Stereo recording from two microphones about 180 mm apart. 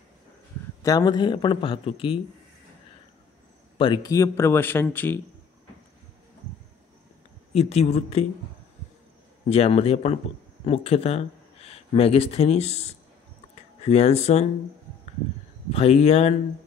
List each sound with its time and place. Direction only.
0.8 s a man's voice: 20° left (ahead or behind)
3.7 s a man's voice: 25° left (ahead or behind); by 5.2 s 10° left (ahead or behind)
7.5 s speech: 35° left (ahead or behind)
9.5 s speech: 35° left (ahead or behind)
15.7 s speech: 35° left (ahead or behind)